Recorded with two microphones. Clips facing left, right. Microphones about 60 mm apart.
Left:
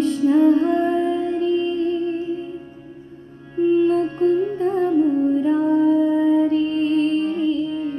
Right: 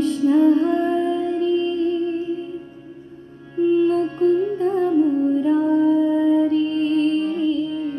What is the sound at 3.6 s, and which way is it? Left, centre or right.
Music, left.